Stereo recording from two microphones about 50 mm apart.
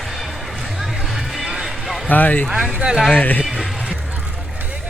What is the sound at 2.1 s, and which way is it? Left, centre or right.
Speech, left.